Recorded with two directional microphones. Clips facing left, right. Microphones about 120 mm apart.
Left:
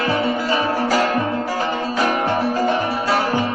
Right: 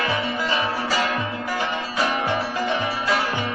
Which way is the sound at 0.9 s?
45° left (ahead or behind).